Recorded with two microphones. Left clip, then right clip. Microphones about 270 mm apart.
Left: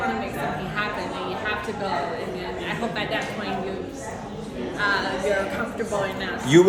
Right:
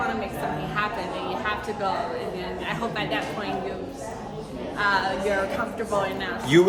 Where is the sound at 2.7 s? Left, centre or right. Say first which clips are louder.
Left 1 dB; centre.